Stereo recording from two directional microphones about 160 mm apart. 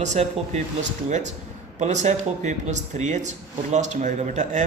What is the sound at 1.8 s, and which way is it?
Speech, 45° right (ahead or behind).